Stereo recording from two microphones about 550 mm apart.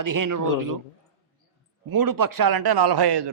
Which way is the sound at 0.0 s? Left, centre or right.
Right.